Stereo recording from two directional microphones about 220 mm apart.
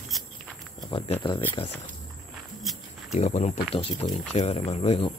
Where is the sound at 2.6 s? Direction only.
Centre (ahead or behind).